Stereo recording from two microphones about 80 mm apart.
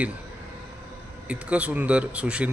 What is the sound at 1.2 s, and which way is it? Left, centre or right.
Speech, centre.